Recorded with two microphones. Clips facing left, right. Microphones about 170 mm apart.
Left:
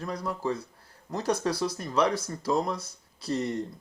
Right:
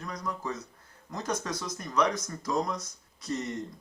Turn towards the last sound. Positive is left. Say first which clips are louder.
# left 4 dB
turn(degrees=30)  # may be behind; listen again after turning